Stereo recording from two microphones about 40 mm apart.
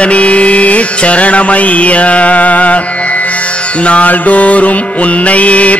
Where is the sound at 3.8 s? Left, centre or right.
Left.